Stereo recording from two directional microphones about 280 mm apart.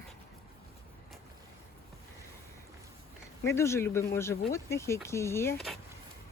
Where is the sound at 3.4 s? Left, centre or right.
Centre.